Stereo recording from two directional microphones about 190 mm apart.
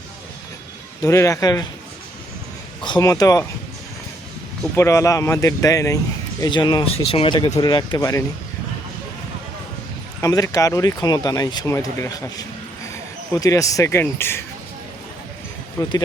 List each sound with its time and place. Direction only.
1.0 s speech: 15° left (ahead or behind)
2.8 s speech: 20° left (ahead or behind)
4.8 s speech: 15° left (ahead or behind)
10.2 s speech: 15° left (ahead or behind)
15.8 s speech: 20° left (ahead or behind)